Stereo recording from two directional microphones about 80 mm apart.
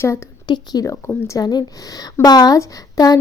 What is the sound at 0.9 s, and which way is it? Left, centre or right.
Speech, left.